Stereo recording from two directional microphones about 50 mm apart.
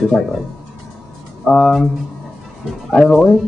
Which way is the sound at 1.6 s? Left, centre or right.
Centre.